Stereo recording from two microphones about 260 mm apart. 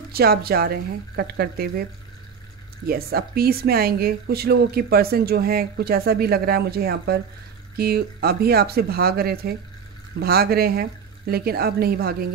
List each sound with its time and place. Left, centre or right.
0.1 s a woman's voice: right
2.9 s a woman's voice: right